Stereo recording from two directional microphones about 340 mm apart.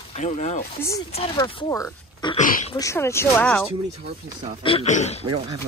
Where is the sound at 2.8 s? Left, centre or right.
Centre.